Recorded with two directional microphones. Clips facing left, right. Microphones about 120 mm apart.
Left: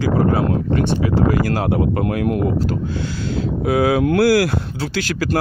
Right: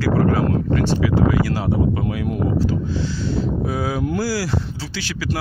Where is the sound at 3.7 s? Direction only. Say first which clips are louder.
Left 7 dB; 75° left (ahead or behind).